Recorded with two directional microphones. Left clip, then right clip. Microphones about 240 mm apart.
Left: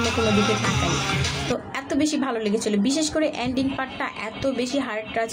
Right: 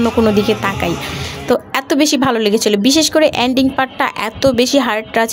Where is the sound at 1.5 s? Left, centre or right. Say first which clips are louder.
Right 11 dB; right.